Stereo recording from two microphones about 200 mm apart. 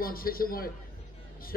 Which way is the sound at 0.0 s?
45° left (ahead or behind).